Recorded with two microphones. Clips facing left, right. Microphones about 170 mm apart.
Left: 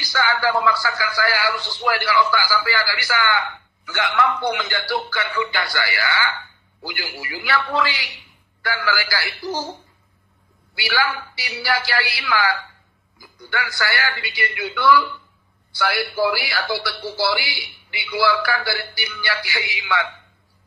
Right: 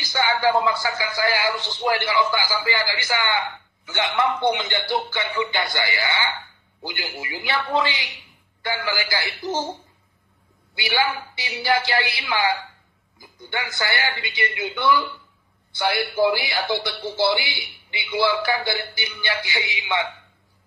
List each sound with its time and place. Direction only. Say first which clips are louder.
0.0 s a man's voice: right 1 dB; 20° right (ahead or behind)
10.7 s a man's voice: even; 20° right (ahead or behind)